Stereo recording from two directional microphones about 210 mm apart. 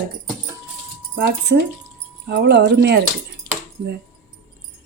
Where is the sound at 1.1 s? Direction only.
55° right (ahead or behind).